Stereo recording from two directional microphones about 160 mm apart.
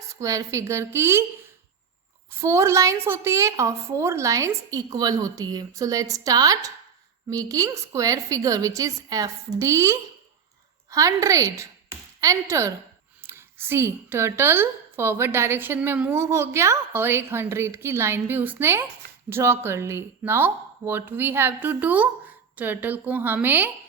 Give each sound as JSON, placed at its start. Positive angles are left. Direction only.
{"t": 0.1, "sound": "a woman's voice", "side_deg": -20}
{"t": 2.3, "sound": "a woman's voice", "side_deg": -15}